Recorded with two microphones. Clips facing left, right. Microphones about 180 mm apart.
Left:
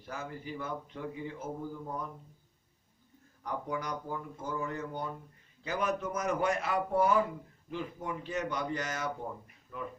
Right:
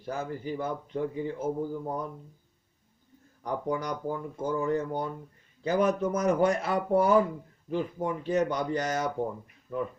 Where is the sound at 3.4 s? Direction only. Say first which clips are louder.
Right 6 dB; 35° right (ahead or behind).